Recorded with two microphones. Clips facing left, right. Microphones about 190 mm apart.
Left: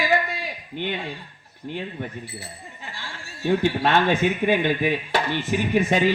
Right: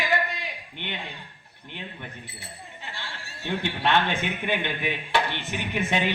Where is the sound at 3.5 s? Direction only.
40° left (ahead or behind).